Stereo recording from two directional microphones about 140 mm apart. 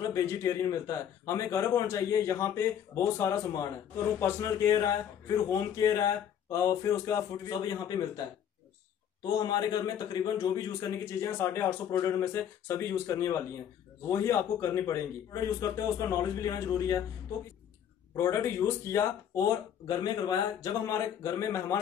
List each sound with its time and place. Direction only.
0.1 s a man's voice: 20° left (ahead or behind)
9.2 s a man's voice: 30° left (ahead or behind)
18.1 s a man's voice: 20° left (ahead or behind)